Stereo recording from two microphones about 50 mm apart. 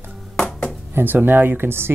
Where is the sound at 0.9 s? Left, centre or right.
Right.